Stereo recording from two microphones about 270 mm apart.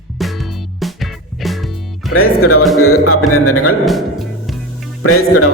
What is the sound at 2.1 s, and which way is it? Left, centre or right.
A man's voice, left.